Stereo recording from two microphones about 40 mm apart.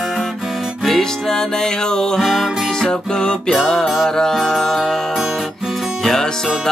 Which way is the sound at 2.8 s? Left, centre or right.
Centre.